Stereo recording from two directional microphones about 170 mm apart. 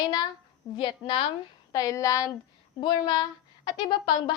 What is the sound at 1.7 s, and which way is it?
A woman's voice, 20° left (ahead or behind).